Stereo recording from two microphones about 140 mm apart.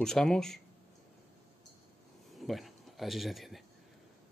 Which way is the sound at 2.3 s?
Centre (ahead or behind).